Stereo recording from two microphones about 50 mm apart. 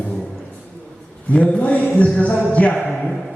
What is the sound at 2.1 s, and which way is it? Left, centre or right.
Music, left.